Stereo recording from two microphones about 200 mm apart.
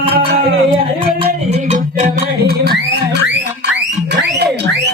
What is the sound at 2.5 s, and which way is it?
Music, 55° right (ahead or behind).